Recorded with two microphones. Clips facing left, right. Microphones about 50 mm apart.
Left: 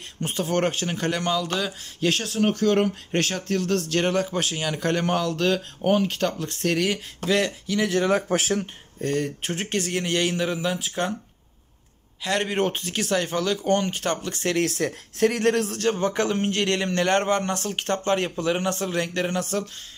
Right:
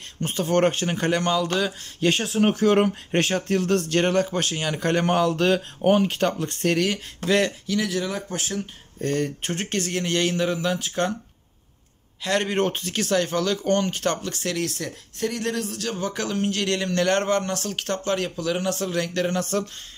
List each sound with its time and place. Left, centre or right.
0.2 s speech: centre
8.3 s speech: left
9.0 s speech: centre
12.2 s speech: centre
14.3 s speech: left
14.6 s speech: left
15.9 s speech: left
19.5 s speech: centre